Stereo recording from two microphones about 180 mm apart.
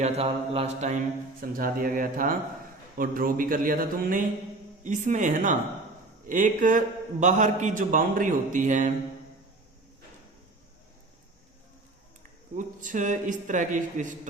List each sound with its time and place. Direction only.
0.0 s mantra: 35° right (ahead or behind)
1.4 s a man's voice: 50° right (ahead or behind)
12.5 s a man's voice: 45° right (ahead or behind)